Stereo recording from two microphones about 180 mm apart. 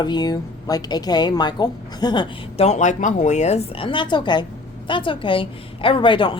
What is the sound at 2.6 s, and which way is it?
A woman's voice, 40° left (ahead or behind).